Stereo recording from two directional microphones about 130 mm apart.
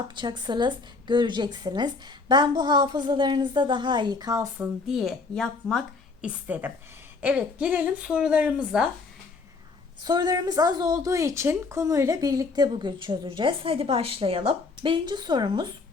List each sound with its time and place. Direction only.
0.2 s a woman's voice: 35° right (ahead or behind)
4.5 s speech: 5° right (ahead or behind)
6.2 s speech: 15° right (ahead or behind)
10.0 s a woman's voice: 30° right (ahead or behind)